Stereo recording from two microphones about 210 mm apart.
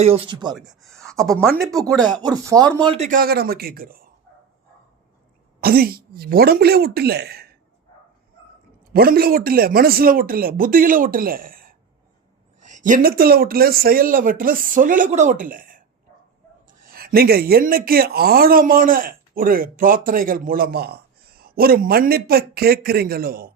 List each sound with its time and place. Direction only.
0.0 s speech: 25° right (ahead or behind)
0.5 s speech: centre (ahead or behind)
2.2 s speech: 15° right (ahead or behind)
3.1 s speech: 45° right (ahead or behind)
5.5 s speech: 45° right (ahead or behind)
8.9 s speech: 45° right (ahead or behind)
16.8 s speech: 45° right (ahead or behind)